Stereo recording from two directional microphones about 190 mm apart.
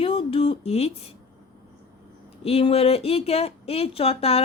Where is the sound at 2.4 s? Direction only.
30° left (ahead or behind).